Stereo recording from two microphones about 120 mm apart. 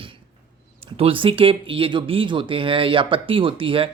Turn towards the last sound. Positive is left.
turn(degrees=-45)  # may be behind; listen again after turning